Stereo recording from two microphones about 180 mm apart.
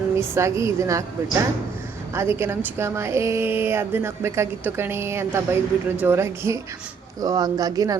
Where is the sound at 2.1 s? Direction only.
15° right (ahead or behind).